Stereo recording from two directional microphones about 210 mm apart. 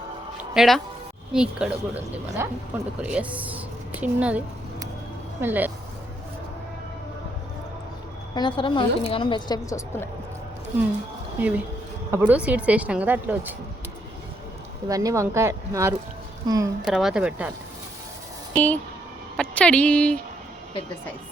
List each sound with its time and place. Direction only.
0.5 s speech: centre (ahead or behind)
8.4 s a woman's voice: 25° left (ahead or behind)
11.3 s speech: 5° right (ahead or behind)
14.8 s speech: 15° right (ahead or behind)
16.8 s speech: 5° right (ahead or behind)
18.5 s speech: 10° left (ahead or behind)